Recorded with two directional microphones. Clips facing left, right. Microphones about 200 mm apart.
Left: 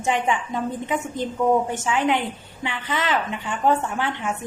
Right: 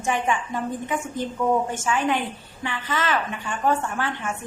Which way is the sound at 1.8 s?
20° left (ahead or behind).